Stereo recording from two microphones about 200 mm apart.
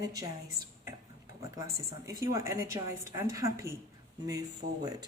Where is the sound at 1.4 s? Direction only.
15° right (ahead or behind).